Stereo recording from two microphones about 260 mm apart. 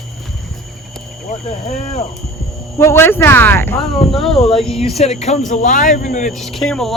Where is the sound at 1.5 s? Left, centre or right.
Left.